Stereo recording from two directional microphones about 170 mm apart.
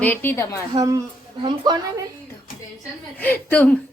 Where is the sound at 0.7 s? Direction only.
20° right (ahead or behind).